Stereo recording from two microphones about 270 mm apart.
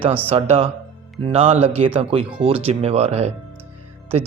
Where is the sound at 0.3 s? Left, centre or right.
Right.